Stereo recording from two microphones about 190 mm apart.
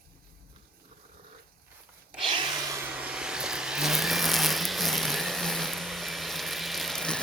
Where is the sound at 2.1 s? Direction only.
25° right (ahead or behind).